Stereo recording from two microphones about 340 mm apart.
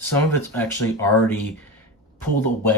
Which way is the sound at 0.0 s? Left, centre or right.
Centre.